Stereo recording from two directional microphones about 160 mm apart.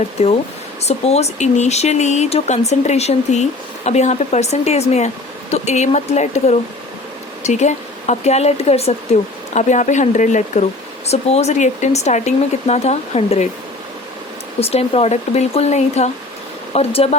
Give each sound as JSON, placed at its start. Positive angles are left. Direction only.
{"t": 0.2, "sound": "speech", "side_deg": 40}
{"t": 14.6, "sound": "speech", "side_deg": 40}